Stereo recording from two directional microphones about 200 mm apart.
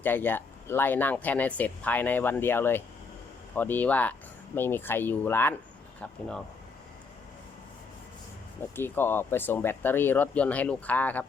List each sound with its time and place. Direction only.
0.0 s speech: 10° left (ahead or behind)
8.7 s speech: 10° left (ahead or behind)